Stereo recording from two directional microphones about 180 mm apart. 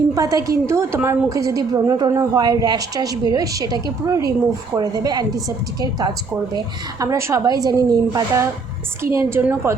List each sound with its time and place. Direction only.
0.1 s a woman's voice: 20° right (ahead or behind)